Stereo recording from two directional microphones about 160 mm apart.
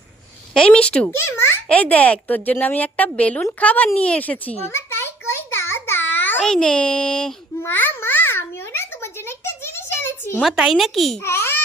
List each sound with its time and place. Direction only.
0.5 s a child's voice: 5° left (ahead or behind)
7.6 s babbling: 15° left (ahead or behind)
9.9 s a sound: 15° left (ahead or behind)
10.4 s a child's voice: centre (ahead or behind)
11.3 s babbling: 15° left (ahead or behind)